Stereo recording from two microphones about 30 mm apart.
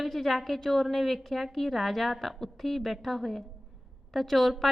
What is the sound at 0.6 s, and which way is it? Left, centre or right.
A woman's voice, centre.